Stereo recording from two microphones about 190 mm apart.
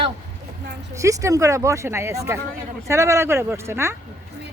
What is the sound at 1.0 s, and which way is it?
Speech, 15° right (ahead or behind).